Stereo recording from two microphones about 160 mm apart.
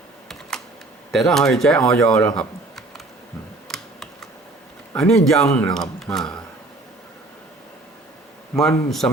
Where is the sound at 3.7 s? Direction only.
5° left (ahead or behind).